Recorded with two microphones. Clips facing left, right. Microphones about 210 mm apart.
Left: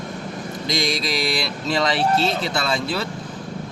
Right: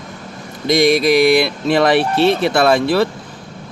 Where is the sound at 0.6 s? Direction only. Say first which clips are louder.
Right 12 dB; 55° right (ahead or behind).